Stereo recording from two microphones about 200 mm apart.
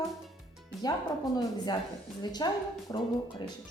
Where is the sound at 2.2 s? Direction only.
20° left (ahead or behind).